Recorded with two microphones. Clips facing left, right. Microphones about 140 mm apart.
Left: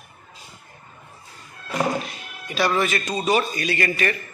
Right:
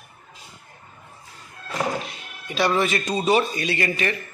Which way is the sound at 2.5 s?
25° right (ahead or behind).